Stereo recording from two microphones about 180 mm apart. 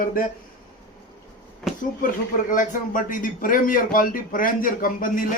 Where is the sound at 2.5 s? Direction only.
45° left (ahead or behind).